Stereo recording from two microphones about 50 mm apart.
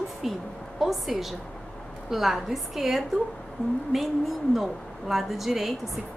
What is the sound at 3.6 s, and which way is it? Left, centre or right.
Speech, left.